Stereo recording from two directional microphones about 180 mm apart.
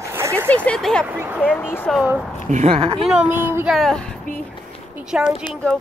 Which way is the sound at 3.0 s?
5° right (ahead or behind).